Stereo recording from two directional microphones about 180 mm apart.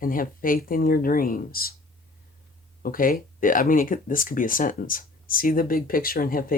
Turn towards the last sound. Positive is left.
turn(degrees=55)  # may be behind; listen again after turning